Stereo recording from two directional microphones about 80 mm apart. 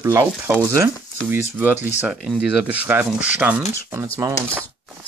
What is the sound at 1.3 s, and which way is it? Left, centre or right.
Speech, right.